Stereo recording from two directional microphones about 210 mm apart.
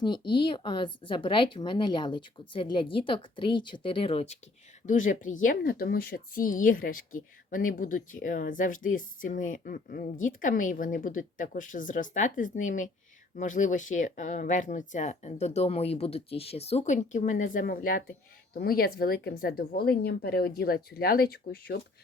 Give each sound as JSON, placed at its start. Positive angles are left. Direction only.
{"t": 0.0, "sound": "a woman's voice", "side_deg": 20}